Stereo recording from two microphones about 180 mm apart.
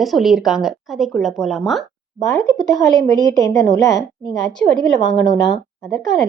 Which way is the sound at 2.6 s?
20° left (ahead or behind).